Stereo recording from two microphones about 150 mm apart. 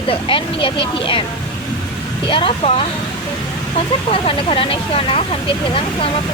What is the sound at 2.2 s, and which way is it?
Speech, 35° left (ahead or behind).